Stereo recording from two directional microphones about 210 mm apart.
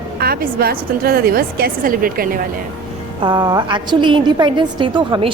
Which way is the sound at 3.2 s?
20° right (ahead or behind).